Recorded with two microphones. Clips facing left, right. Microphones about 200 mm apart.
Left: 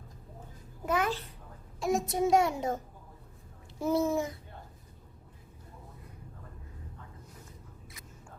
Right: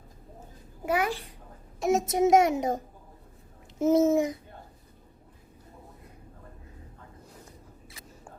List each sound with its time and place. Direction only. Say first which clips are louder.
0.9 s a child's voice: right 2 dB; 10° right (ahead or behind)
1.8 s a child's voice: right 5 dB; 20° right (ahead or behind)
3.8 s a child's voice: right 7 dB; 20° right (ahead or behind)